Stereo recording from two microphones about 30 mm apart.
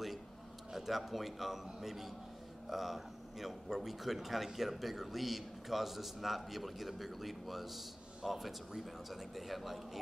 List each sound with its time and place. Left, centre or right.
0.7 s a man's voice: centre